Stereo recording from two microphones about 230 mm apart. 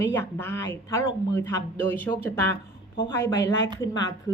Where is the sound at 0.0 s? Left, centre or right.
Centre.